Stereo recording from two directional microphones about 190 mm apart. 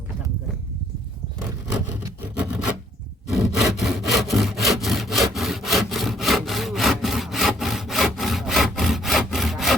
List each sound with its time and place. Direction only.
2.0 s vehicle: 5° right (ahead or behind)
3.3 s sawing: centre (ahead or behind)